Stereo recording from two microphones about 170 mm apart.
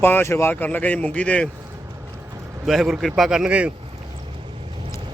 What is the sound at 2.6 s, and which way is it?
Speech, centre (ahead or behind).